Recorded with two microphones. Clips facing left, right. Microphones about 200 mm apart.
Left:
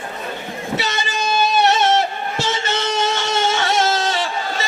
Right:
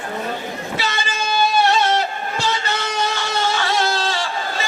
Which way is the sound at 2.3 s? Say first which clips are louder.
Left 1 dB; 25° left (ahead or behind).